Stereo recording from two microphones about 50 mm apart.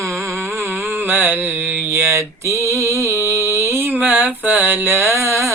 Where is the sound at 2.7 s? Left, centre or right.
Right.